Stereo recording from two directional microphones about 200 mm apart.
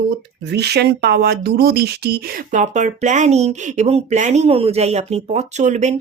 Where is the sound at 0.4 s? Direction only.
55° right (ahead or behind).